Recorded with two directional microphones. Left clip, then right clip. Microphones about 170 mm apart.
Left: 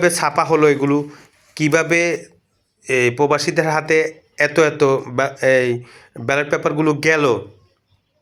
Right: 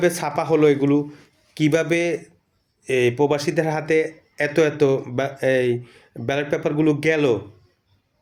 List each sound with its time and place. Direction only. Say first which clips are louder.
0.0 s speech: left 5 dB; 15° right (ahead or behind)